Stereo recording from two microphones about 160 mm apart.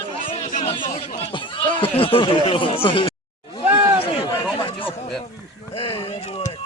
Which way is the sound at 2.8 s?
35° left (ahead or behind).